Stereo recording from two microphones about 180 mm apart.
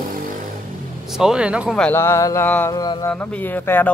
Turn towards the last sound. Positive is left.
turn(degrees=10)  # may be behind; listen again after turning